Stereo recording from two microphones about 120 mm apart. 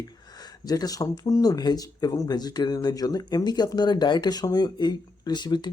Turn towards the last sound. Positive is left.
turn(degrees=35)  # may be behind; listen again after turning